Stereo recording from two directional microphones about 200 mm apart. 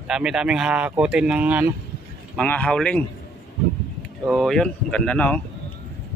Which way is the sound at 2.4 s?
5° left (ahead or behind).